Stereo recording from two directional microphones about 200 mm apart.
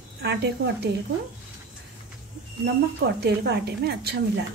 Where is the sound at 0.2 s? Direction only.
55° right (ahead or behind).